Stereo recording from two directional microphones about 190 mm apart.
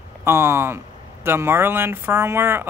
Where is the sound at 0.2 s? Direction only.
15° right (ahead or behind).